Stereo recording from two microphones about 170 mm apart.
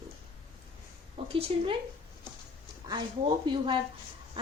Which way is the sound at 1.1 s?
35° right (ahead or behind).